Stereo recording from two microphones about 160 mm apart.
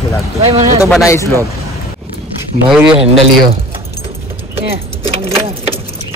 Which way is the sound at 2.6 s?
5° right (ahead or behind).